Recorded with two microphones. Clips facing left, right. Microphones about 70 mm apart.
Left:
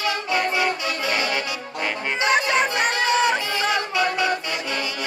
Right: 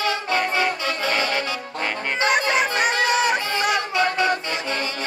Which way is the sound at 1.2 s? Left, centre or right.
Right.